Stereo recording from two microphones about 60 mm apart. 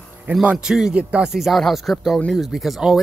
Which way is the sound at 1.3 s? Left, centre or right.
Centre.